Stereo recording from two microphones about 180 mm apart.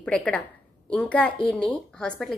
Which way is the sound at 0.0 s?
5° left (ahead or behind).